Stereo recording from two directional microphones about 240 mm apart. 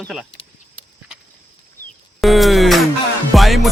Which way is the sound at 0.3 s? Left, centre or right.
Left.